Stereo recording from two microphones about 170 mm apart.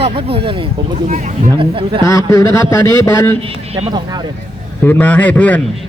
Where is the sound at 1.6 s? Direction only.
30° right (ahead or behind).